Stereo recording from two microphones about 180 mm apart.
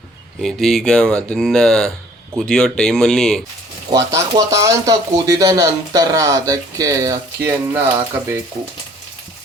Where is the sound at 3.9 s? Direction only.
20° right (ahead or behind).